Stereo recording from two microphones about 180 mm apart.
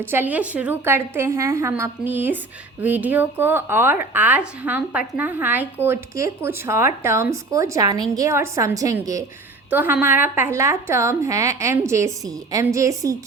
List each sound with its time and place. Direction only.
0.0 s a woman's voice: 10° right (ahead or behind)